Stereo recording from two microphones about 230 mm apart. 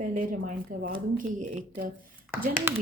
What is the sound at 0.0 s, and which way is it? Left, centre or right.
Speech, right.